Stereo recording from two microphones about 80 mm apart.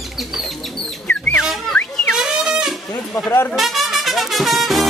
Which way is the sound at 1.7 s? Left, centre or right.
Centre.